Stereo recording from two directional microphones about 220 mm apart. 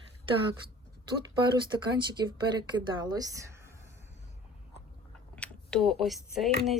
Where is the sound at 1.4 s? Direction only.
20° right (ahead or behind).